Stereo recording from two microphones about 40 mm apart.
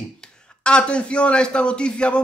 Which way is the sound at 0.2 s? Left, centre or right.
Left.